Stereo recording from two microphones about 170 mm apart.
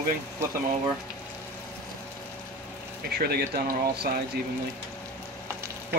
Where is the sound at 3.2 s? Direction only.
65° right (ahead or behind).